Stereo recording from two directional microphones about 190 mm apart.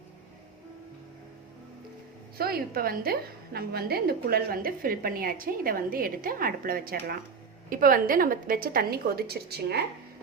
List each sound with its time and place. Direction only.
2.4 s a woman's voice: 50° right (ahead or behind)